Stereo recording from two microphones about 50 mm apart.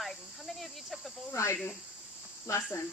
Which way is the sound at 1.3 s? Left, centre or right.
Left.